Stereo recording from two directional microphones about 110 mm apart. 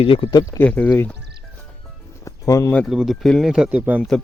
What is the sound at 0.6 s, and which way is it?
Speech, 15° left (ahead or behind).